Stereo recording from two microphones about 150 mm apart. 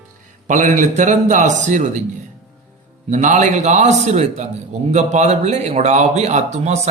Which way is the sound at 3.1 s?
55° right (ahead or behind).